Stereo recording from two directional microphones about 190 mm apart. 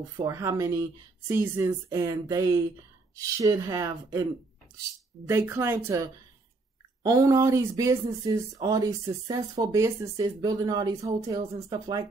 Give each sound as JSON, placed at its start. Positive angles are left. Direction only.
{"t": 0.2, "sound": "speech", "side_deg": -15}
{"t": 7.0, "sound": "speech", "side_deg": -20}